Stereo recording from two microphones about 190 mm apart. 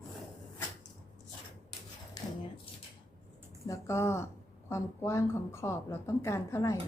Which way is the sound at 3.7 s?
15° left (ahead or behind).